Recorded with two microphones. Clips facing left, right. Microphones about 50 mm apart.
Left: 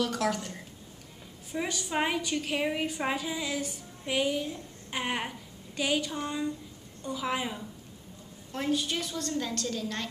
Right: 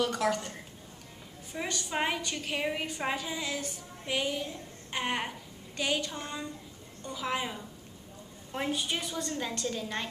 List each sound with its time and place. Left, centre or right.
0.0 s a woman's voice: centre
8.5 s a woman's voice: centre